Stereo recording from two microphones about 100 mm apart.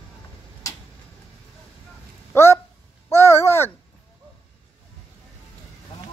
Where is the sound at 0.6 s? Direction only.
30° left (ahead or behind).